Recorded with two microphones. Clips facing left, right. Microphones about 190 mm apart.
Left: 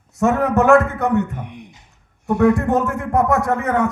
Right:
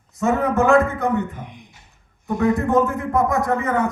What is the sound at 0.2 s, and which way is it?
A man's voice, 70° left (ahead or behind).